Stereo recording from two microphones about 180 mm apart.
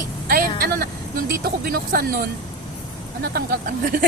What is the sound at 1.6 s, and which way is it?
Speech, 55° right (ahead or behind).